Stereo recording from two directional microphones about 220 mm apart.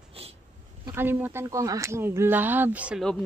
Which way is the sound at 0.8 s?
10° right (ahead or behind).